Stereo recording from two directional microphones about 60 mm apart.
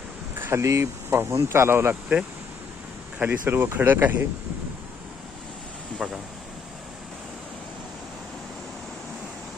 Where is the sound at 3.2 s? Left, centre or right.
Right.